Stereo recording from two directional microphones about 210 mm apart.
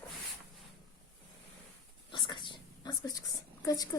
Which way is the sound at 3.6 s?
15° left (ahead or behind).